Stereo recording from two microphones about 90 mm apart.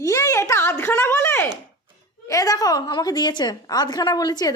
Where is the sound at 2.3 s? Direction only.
40° left (ahead or behind).